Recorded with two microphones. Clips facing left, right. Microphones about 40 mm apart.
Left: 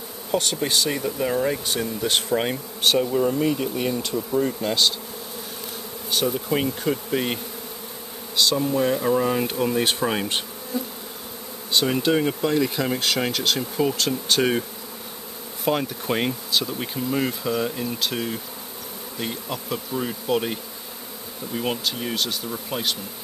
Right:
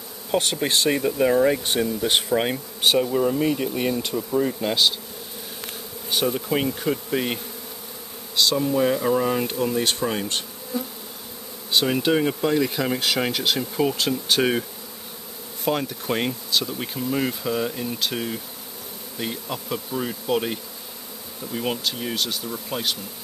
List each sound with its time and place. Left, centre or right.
0.3 s speech: right
2.2 s bee: centre
6.0 s bee: centre
6.5 s speech: centre
8.4 s speech: centre
11.7 s speech: centre
15.6 s speech: centre
21.5 s speech: centre